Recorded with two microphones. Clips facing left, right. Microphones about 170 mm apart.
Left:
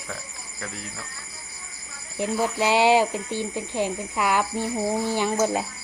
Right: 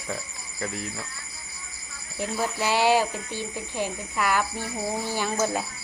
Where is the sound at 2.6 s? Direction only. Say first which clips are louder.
Left 3 dB; 20° left (ahead or behind).